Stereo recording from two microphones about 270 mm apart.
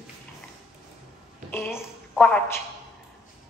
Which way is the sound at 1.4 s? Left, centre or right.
Centre.